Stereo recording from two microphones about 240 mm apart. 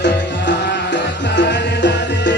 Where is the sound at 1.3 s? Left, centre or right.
Left.